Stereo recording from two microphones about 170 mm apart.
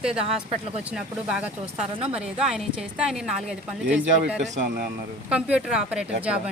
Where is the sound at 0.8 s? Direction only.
5° right (ahead or behind).